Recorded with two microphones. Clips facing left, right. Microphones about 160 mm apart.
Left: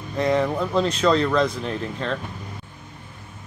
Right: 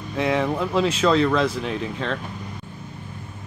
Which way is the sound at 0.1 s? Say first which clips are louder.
Left 1 dB; centre (ahead or behind).